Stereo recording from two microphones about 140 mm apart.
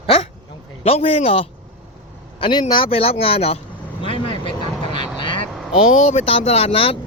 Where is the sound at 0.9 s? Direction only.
45° left (ahead or behind).